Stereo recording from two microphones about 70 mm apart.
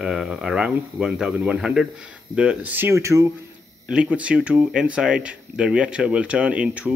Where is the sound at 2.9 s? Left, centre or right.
Right.